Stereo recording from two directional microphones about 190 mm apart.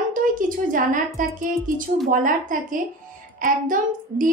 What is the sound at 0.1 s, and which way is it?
A woman's voice, 45° right (ahead or behind).